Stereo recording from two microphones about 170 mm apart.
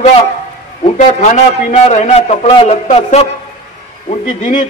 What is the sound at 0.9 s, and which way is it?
A man's voice, 45° left (ahead or behind).